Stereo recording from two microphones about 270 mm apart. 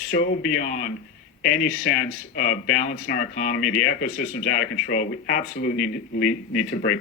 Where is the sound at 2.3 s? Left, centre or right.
Left.